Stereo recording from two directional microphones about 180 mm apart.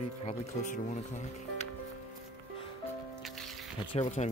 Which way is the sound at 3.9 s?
30° left (ahead or behind).